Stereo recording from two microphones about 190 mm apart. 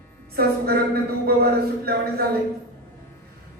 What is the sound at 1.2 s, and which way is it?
Speech, 55° right (ahead or behind).